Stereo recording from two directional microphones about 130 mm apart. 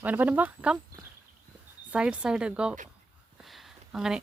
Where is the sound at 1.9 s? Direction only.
10° right (ahead or behind).